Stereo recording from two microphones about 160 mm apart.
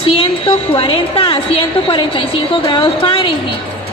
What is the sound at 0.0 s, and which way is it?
A woman's voice, 35° left (ahead or behind).